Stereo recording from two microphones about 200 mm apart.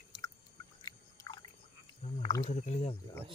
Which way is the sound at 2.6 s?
35° left (ahead or behind).